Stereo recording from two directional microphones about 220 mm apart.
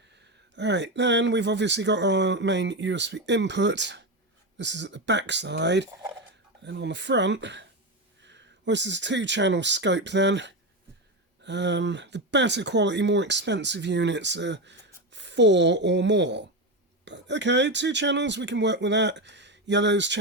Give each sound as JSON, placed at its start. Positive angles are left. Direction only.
{"t": 0.5, "sound": "speech", "side_deg": -50}